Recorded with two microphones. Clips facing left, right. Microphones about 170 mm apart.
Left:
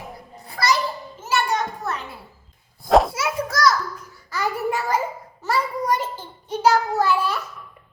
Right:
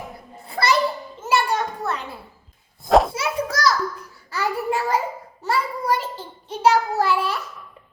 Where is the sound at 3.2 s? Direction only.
30° right (ahead or behind).